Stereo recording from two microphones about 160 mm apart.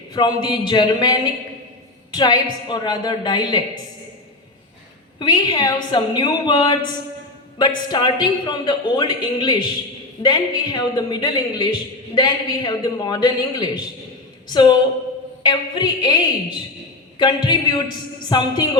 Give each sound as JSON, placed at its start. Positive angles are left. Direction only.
{"t": 0.1, "sound": "a man's voice", "side_deg": 30}
{"t": 5.2, "sound": "a man's voice", "side_deg": 30}
{"t": 7.9, "sound": "a man's voice", "side_deg": 30}